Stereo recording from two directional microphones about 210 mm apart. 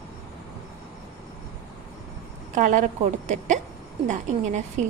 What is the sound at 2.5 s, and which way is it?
A woman's voice, 35° right (ahead or behind).